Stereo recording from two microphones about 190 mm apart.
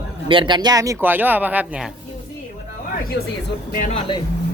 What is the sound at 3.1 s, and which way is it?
Speech, 65° left (ahead or behind).